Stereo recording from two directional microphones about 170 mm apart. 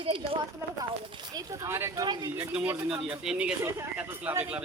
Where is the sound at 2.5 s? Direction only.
5° right (ahead or behind).